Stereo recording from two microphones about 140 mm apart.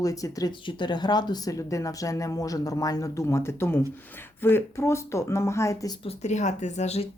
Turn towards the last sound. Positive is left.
turn(degrees=50)  # may be behind; listen again after turning